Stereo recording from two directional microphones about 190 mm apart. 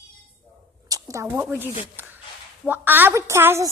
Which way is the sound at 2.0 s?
10° right (ahead or behind).